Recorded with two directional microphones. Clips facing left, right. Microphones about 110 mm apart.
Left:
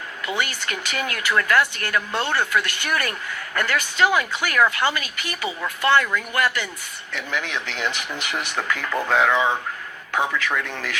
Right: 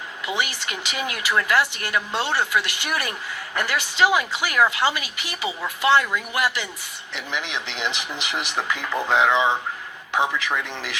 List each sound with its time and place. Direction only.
0.3 s speech: 20° right (ahead or behind)